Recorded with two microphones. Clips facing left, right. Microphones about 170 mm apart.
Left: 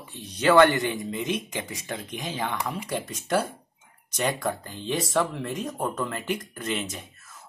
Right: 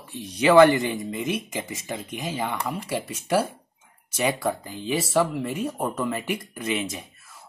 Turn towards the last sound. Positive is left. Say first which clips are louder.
# right 4 dB
turn(degrees=-10)  # may be behind; listen again after turning